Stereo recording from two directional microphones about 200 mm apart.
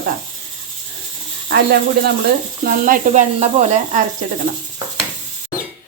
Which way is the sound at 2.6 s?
40° right (ahead or behind).